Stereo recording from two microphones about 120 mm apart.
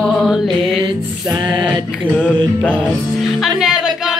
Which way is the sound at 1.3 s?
40° right (ahead or behind).